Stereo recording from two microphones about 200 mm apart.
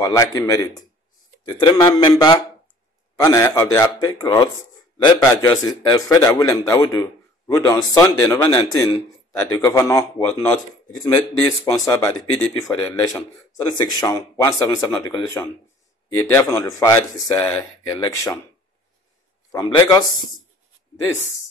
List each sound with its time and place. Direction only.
0.0 s a man's voice: 15° left (ahead or behind)
19.5 s a man's voice: 20° left (ahead or behind)